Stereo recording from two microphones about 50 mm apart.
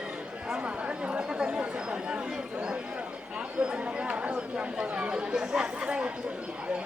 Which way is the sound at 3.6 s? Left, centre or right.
Centre.